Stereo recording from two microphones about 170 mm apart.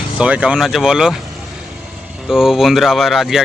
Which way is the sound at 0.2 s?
5° right (ahead or behind).